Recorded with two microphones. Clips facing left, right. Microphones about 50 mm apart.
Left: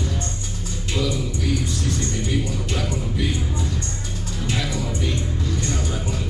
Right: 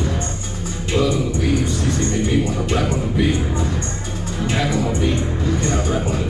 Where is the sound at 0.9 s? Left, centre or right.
Right.